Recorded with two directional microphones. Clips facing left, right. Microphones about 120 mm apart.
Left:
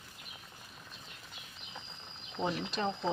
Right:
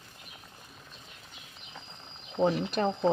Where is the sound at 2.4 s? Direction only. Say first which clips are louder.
Right 7 dB; 50° right (ahead or behind).